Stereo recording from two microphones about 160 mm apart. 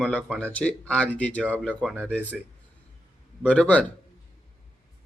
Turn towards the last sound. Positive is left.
turn(degrees=5)  # may be behind; listen again after turning